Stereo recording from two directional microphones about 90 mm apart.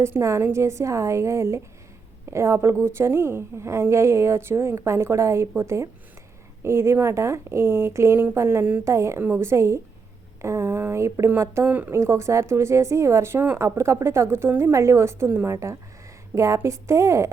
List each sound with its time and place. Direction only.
0.0 s a woman's voice: 30° right (ahead or behind)